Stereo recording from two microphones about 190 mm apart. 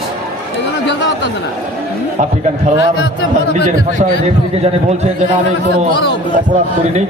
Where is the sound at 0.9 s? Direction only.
70° left (ahead or behind).